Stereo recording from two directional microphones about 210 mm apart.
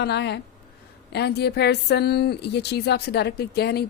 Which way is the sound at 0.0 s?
55° left (ahead or behind).